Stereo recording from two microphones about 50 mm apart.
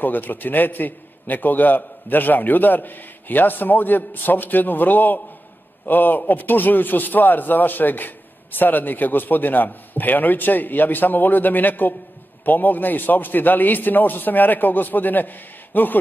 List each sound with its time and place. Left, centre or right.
0.0 s a man's voice: left